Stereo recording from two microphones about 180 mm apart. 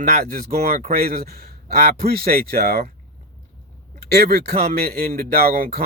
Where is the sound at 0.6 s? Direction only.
55° right (ahead or behind).